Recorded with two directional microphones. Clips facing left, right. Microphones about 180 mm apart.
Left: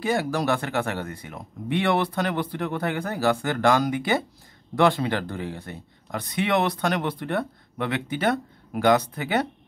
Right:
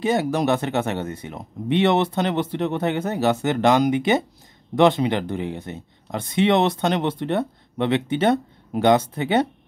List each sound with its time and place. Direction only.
0.0 s speech: 20° right (ahead or behind)